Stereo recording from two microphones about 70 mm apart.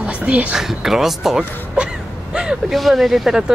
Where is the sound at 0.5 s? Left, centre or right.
Centre.